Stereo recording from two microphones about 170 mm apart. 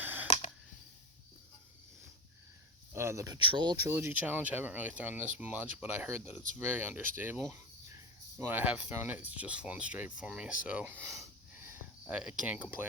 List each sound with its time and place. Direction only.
0.0 s camera: 10° right (ahead or behind)
2.9 s speech: 15° right (ahead or behind)
3.8 s speech: 15° right (ahead or behind)
11.6 s cricket: 10° right (ahead or behind)